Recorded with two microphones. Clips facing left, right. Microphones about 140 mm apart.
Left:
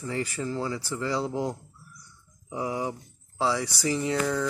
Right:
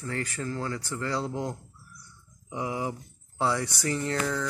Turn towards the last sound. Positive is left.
turn(degrees=10)  # may be behind; listen again after turning